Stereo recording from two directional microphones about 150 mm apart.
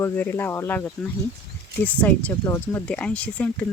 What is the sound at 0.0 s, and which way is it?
Speech, 15° left (ahead or behind).